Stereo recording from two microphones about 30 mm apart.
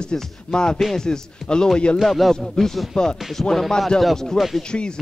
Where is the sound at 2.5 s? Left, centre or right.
Centre.